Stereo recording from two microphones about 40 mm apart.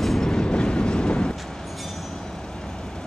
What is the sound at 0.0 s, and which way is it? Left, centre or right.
Train, centre.